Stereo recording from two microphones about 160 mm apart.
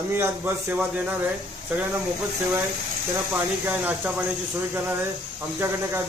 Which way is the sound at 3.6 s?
10° right (ahead or behind).